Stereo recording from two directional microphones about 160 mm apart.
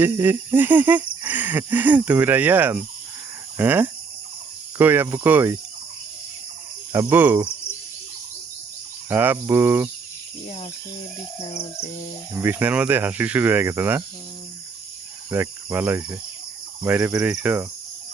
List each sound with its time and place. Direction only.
0.0 s speech: 15° right (ahead or behind)
6.9 s speech: 15° right (ahead or behind)
9.0 s speech: 15° right (ahead or behind)
11.3 s cricket: 35° left (ahead or behind)
12.3 s speech: 15° right (ahead or behind)
15.3 s speech: 15° right (ahead or behind)